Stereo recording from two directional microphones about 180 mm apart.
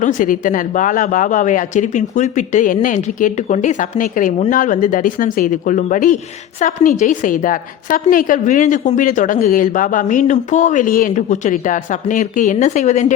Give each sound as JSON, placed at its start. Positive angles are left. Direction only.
{"t": 0.0, "sound": "a woman's voice", "side_deg": 45}